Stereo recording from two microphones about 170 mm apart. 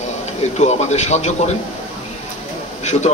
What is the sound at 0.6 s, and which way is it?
Speech, 40° left (ahead or behind).